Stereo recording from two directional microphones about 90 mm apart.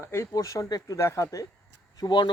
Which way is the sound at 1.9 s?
50° left (ahead or behind).